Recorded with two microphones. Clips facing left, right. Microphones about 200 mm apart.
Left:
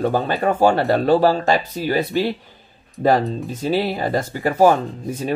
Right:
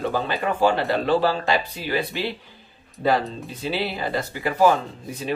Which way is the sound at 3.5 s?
45° left (ahead or behind).